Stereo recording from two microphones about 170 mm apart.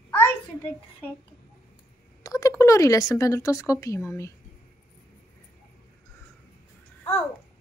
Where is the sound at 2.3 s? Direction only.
20° left (ahead or behind).